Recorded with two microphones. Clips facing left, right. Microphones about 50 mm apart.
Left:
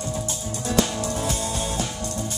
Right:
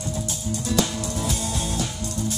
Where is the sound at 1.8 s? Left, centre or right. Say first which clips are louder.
Even; left.